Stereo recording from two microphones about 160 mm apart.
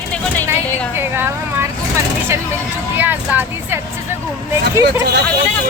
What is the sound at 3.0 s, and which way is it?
Speech, 10° right (ahead or behind).